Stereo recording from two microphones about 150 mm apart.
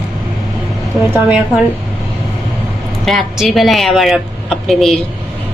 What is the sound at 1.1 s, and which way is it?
Speech, 10° right (ahead or behind).